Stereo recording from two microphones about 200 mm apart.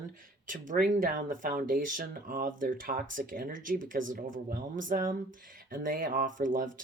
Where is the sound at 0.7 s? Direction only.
40° right (ahead or behind).